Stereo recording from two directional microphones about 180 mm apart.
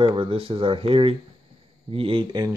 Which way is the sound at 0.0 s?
30° right (ahead or behind).